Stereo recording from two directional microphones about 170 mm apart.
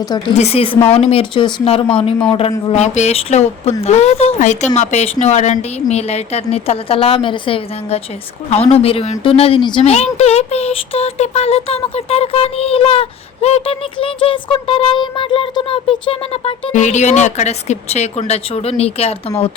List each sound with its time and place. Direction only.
0.3 s speech: 35° left (ahead or behind)
9.9 s speech: 40° left (ahead or behind)
16.7 s speech: 45° left (ahead or behind)